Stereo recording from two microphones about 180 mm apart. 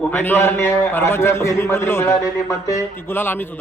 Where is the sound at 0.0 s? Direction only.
10° left (ahead or behind).